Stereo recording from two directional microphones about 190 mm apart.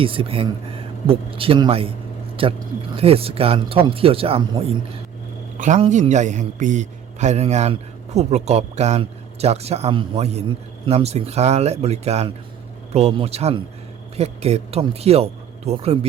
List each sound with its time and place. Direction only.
0.0 s speech: 30° right (ahead or behind)
5.5 s a man's voice: 40° right (ahead or behind)